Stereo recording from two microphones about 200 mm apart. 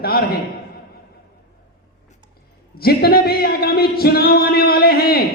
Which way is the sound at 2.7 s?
50° left (ahead or behind).